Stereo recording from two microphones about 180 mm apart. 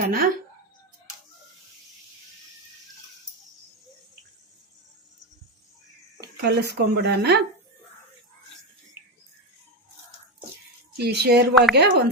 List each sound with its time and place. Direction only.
0.0 s speech: 55° right (ahead or behind)
6.4 s speech: 65° right (ahead or behind)
10.9 s speech: 65° right (ahead or behind)